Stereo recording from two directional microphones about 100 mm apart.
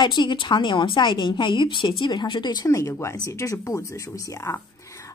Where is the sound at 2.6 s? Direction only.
30° left (ahead or behind).